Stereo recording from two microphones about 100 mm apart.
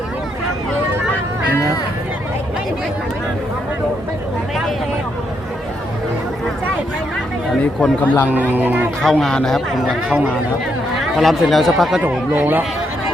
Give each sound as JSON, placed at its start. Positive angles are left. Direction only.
{"t": 7.6, "sound": "speech", "side_deg": 15}
{"t": 8.3, "sound": "speech", "side_deg": -15}
{"t": 9.0, "sound": "speech", "side_deg": 5}
{"t": 11.2, "sound": "speech", "side_deg": 0}
{"t": 12.0, "sound": "speech", "side_deg": -20}